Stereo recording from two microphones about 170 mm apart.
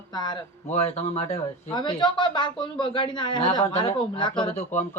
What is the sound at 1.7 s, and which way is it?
Speech, 25° left (ahead or behind).